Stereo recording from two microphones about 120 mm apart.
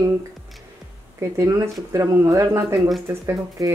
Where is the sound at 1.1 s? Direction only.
25° right (ahead or behind).